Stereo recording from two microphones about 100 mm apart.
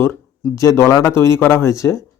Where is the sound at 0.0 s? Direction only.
25° left (ahead or behind).